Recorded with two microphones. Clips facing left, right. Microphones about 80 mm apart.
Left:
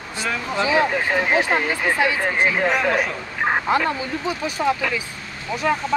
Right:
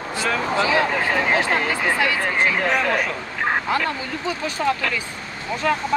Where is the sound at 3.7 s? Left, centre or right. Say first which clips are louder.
Left 2 dB; centre.